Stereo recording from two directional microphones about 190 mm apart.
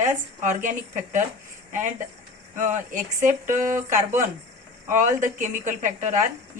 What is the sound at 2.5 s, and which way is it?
A woman's voice, 40° right (ahead or behind).